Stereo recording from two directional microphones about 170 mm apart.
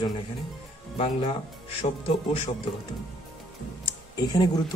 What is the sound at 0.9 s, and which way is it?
Speech, 30° left (ahead or behind).